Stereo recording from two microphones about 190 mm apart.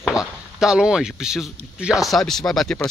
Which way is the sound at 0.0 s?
5° right (ahead or behind).